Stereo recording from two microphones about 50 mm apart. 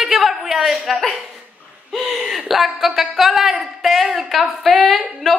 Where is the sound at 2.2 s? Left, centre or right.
Centre.